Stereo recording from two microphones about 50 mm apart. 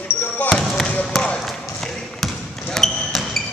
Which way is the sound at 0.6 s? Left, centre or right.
Centre.